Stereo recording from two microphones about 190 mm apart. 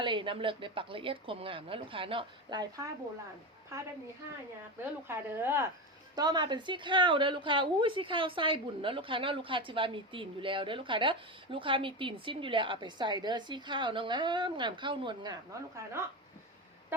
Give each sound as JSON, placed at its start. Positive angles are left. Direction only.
{"t": 0.0, "sound": "a woman's voice", "side_deg": -25}
{"t": 5.0, "sound": "a woman's voice", "side_deg": -10}